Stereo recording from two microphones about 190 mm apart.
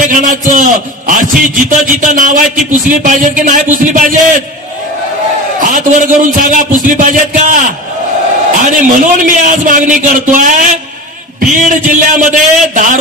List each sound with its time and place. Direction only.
0.1 s a man's voice: 45° right (ahead or behind)
5.6 s a man's voice: 40° right (ahead or behind)